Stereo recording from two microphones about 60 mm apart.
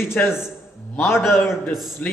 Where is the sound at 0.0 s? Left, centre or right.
Left.